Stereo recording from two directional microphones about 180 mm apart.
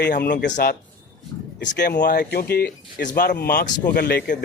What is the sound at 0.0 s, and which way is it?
Speech, 65° left (ahead or behind).